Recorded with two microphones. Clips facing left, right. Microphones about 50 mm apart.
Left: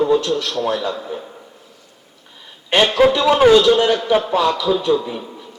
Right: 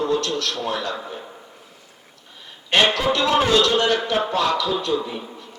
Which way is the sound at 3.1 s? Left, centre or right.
Centre.